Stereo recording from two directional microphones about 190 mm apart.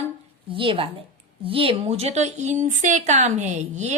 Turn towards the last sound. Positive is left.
turn(degrees=-35)  # may be behind; listen again after turning